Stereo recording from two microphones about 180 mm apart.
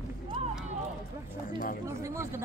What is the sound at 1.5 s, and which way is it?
Speech, 50° left (ahead or behind).